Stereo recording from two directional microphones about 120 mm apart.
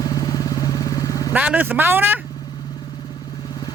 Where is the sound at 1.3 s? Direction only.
15° right (ahead or behind).